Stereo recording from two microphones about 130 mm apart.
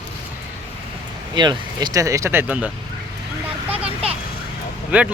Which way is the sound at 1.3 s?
35° right (ahead or behind).